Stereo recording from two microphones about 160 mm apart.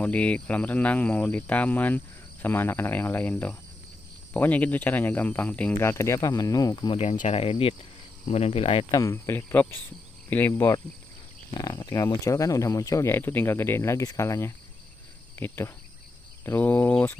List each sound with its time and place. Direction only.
0.0 s speech: 10° left (ahead or behind); by 7.0 s 25° left (ahead or behind)
7.0 s speech: 45° left (ahead or behind)
8.9 s speech: 20° left (ahead or behind)
11.5 s speech: 25° left (ahead or behind); by 17.2 s 10° left (ahead or behind)